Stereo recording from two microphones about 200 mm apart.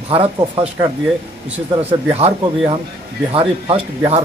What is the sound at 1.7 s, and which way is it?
Speech, 25° right (ahead or behind).